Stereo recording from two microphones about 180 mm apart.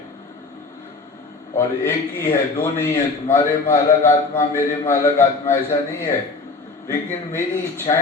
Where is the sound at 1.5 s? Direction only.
15° left (ahead or behind).